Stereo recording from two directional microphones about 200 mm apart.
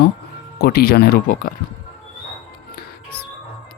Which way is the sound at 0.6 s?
50° left (ahead or behind).